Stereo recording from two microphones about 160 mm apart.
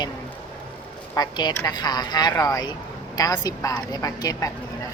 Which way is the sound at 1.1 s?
25° left (ahead or behind).